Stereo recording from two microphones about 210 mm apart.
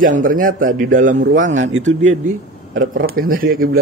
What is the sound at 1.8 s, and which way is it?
Speech, 35° right (ahead or behind).